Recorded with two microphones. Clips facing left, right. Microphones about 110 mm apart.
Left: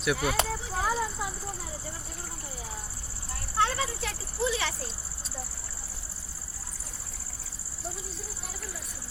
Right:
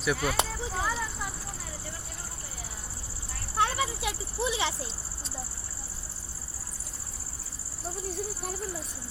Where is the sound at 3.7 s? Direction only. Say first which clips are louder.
Right 2 dB; 10° right (ahead or behind).